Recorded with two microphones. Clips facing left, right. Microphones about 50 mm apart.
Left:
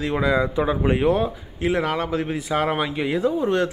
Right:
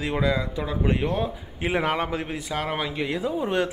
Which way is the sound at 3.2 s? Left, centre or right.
Centre.